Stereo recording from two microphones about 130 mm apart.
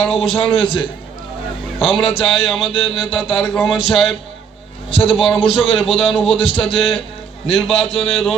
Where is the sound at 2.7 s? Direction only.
45° left (ahead or behind).